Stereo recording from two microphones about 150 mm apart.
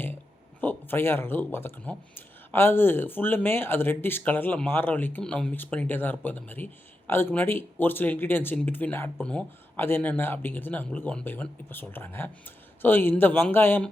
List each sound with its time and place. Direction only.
0.6 s speech: 15° left (ahead or behind)